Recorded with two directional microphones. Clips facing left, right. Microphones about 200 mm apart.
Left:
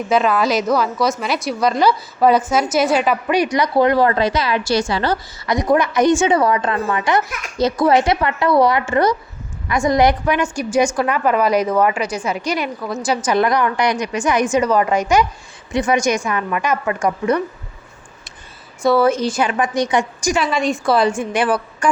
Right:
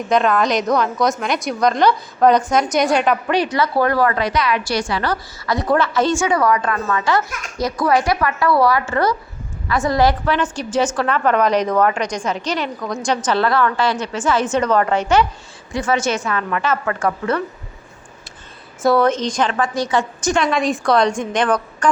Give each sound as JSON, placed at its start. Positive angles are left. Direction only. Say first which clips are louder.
{"t": 0.1, "sound": "a woman's voice", "louder": "even", "side_deg": 5}
{"t": 7.6, "sound": "a woman's voice", "louder": "left 3 dB", "side_deg": 25}
{"t": 18.8, "sound": "a woman's voice", "louder": "left 1 dB", "side_deg": 0}